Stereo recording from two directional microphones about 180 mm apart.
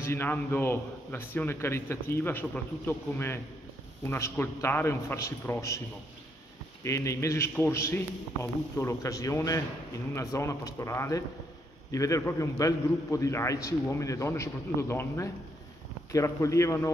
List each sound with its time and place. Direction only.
0.0 s a man's voice: 15° left (ahead or behind)
6.8 s a man's voice: 15° left (ahead or behind)